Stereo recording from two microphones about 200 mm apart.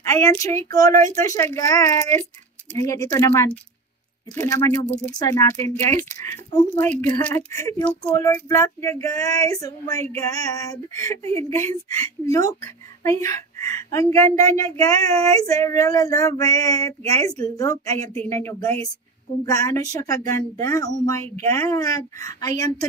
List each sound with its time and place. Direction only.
0.0 s child singing: 15° left (ahead or behind)
6.9 s child singing: 5° left (ahead or behind)